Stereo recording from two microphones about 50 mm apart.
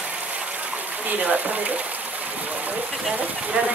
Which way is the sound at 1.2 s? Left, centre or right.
Right.